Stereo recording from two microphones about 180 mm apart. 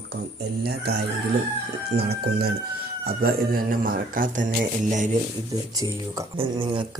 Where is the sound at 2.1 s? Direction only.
65° right (ahead or behind).